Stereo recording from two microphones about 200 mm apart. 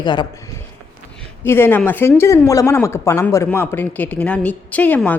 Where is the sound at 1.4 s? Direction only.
10° left (ahead or behind).